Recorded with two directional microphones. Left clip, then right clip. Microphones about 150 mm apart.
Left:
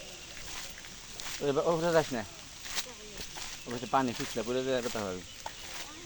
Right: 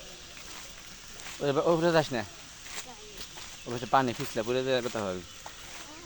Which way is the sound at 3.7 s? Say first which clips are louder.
Right 4 dB; 70° right (ahead or behind).